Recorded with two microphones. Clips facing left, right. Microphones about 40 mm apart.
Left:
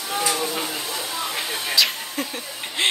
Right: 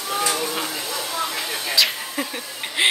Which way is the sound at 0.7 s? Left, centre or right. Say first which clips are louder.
Right 1 dB; left.